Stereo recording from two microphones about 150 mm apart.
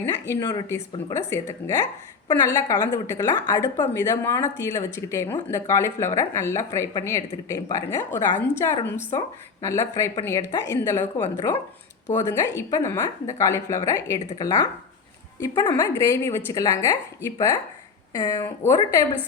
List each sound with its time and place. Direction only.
0.0 s a woman's voice: 20° left (ahead or behind)